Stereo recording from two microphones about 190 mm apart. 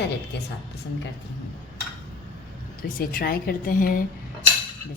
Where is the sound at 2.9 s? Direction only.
50° left (ahead or behind).